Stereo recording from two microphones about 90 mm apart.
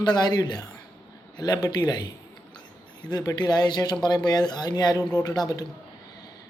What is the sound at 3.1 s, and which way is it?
Speech, 45° left (ahead or behind).